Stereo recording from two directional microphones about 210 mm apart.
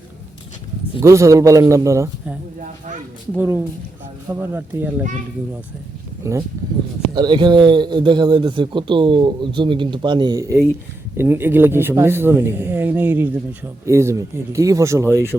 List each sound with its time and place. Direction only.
0.9 s speech: 15° right (ahead or behind)
6.3 s a man's voice: 15° right (ahead or behind)